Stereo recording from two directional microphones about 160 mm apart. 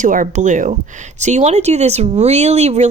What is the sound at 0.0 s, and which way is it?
A woman's voice, 55° right (ahead or behind).